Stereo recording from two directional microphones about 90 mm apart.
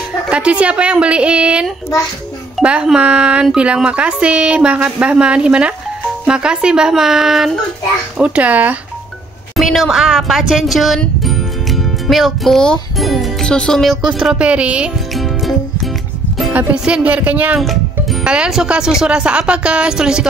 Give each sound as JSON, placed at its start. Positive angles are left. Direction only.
{"t": 0.3, "sound": "a woman's voice", "side_deg": -10}
{"t": 8.2, "sound": "a woman's voice", "side_deg": -15}
{"t": 9.6, "sound": "speech", "side_deg": 0}
{"t": 11.0, "sound": "music", "side_deg": 0}
{"t": 12.9, "sound": "speech", "side_deg": 0}
{"t": 14.0, "sound": "a woman's voice", "side_deg": -5}
{"t": 15.1, "sound": "music", "side_deg": 0}
{"t": 16.7, "sound": "a woman's voice", "side_deg": -10}